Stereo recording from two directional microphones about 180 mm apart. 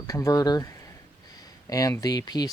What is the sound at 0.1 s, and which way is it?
Speech, 20° left (ahead or behind).